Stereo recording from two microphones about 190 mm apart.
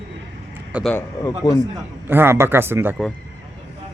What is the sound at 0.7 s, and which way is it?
Speech, 10° right (ahead or behind).